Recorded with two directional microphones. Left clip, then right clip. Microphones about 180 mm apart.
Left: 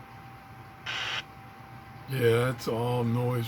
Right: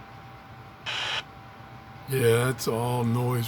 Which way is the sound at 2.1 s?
40° right (ahead or behind).